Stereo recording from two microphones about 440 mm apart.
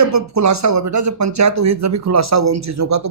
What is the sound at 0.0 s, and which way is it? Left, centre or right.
Speech, right.